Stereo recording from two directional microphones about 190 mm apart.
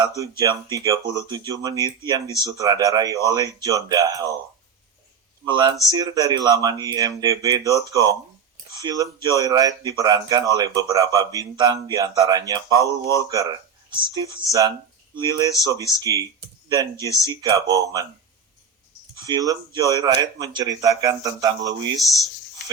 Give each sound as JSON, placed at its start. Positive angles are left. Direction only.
{"t": 0.2, "sound": "speech", "side_deg": -15}
{"t": 5.5, "sound": "speech", "side_deg": -25}
{"t": 19.2, "sound": "speech", "side_deg": -20}